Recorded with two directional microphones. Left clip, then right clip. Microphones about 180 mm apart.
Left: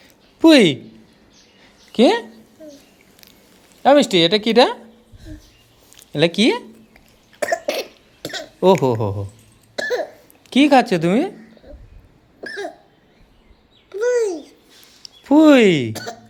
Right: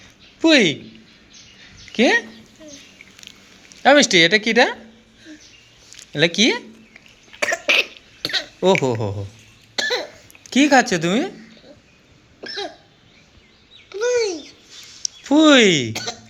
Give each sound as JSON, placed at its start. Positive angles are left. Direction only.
{"t": 0.0, "sound": "a sound", "side_deg": 35}
{"t": 1.9, "sound": "speech", "side_deg": 25}
{"t": 3.8, "sound": "speech", "side_deg": 10}
{"t": 6.1, "sound": "speech", "side_deg": 20}
{"t": 7.4, "sound": "cough", "side_deg": 10}
{"t": 8.6, "sound": "speech", "side_deg": 20}
{"t": 9.7, "sound": "cough", "side_deg": 0}
{"t": 10.5, "sound": "speech", "side_deg": 15}
{"t": 12.4, "sound": "cough", "side_deg": 10}
{"t": 15.0, "sound": "a sound", "side_deg": 20}